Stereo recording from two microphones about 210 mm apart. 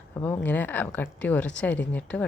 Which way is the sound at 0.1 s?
10° left (ahead or behind).